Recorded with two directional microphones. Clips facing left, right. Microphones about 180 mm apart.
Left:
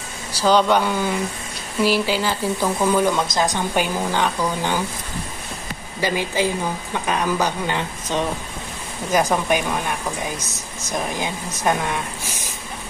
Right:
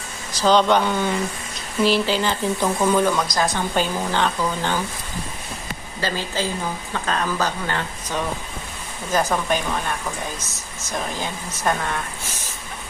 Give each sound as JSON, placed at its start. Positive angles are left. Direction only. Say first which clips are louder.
{"t": 0.3, "sound": "a woman's voice", "louder": "even", "side_deg": 10}
{"t": 3.1, "sound": "a woman's voice", "louder": "left 1 dB", "side_deg": 20}
{"t": 5.9, "sound": "a woman's voice", "louder": "left 4 dB", "side_deg": 15}